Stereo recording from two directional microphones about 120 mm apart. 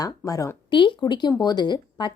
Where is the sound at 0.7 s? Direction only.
40° left (ahead or behind).